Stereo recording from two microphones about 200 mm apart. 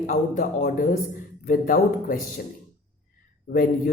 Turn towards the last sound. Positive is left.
turn(degrees=45)  # may be behind; listen again after turning